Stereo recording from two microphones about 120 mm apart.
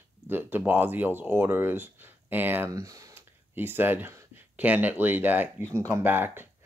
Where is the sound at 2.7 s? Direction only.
25° right (ahead or behind).